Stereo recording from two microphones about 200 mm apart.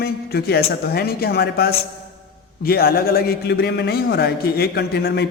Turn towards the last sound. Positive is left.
turn(degrees=55)  # may be behind; listen again after turning